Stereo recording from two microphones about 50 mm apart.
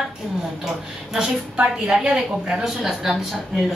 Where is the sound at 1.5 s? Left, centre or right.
Centre.